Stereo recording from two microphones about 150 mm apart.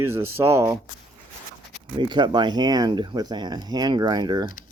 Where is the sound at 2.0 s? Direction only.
30° right (ahead or behind).